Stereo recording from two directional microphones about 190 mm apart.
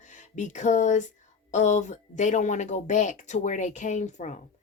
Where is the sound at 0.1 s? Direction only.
40° left (ahead or behind).